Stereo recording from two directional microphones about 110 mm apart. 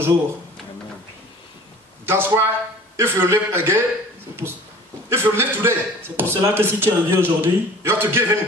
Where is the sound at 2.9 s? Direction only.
20° right (ahead or behind).